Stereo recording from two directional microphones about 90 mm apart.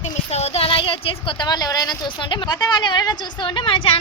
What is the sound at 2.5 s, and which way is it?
A woman's voice, 55° left (ahead or behind).